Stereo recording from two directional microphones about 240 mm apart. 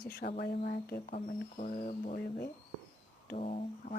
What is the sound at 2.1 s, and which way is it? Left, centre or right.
Speech, left.